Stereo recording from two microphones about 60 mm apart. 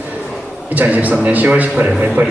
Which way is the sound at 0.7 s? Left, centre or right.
Right.